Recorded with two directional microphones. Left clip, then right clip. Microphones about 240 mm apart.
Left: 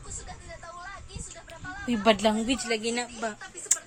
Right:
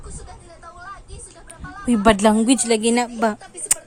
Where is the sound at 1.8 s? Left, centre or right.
Right.